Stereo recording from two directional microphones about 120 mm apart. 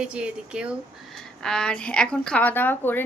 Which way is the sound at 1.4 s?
5° left (ahead or behind).